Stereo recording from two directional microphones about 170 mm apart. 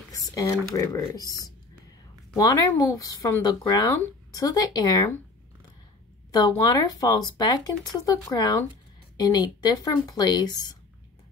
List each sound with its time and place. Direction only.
0.1 s speech: 20° left (ahead or behind)
6.6 s speech: 25° left (ahead or behind)